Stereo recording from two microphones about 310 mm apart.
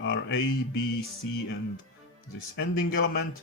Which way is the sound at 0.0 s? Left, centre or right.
Left.